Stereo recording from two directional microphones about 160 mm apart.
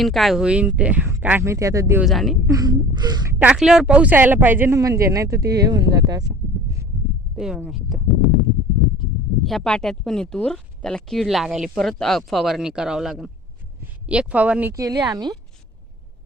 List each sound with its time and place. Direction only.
0.0 s speech: centre (ahead or behind); by 2.0 s 20° right (ahead or behind)
2.0 s speech: centre (ahead or behind)
2.5 s a sound: 25° right (ahead or behind)
3.3 s speech: 5° right (ahead or behind); by 6.3 s 25° right (ahead or behind)
7.3 s speech: 5° right (ahead or behind)
14.7 s a sound: 20° right (ahead or behind)